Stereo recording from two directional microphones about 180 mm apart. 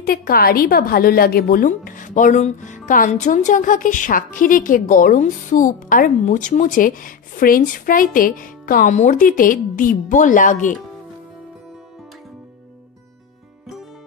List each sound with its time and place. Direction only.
0.0 s a woman's voice: 55° left (ahead or behind)